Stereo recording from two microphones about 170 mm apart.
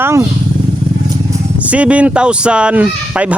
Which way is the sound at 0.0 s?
15° right (ahead or behind).